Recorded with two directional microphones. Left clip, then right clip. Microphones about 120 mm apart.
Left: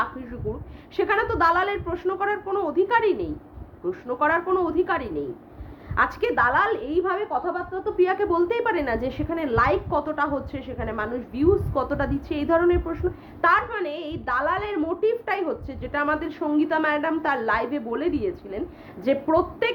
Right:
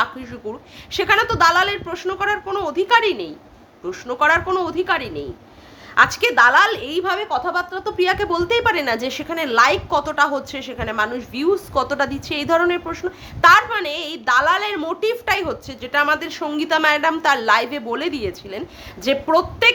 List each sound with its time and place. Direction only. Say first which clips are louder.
0.9 s a woman's voice: right 6 dB; 25° right (ahead or behind)
1.3 s a woman's voice: right 5 dB; 15° right (ahead or behind)
7.0 s a woman's voice: right 7 dB; 40° right (ahead or behind)